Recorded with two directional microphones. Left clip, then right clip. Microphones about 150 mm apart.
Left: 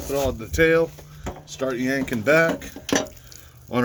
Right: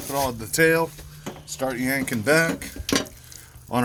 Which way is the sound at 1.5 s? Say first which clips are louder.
Left 1 dB; 70° right (ahead or behind).